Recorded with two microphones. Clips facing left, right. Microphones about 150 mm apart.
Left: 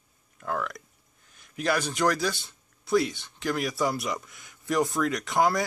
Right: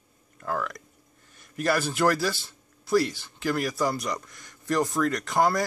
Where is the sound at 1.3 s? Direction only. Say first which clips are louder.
Right 2 dB; centre (ahead or behind).